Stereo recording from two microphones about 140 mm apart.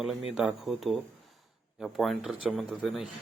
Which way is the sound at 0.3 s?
5° right (ahead or behind).